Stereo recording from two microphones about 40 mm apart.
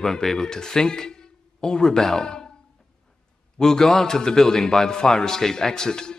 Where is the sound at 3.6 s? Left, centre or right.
Centre.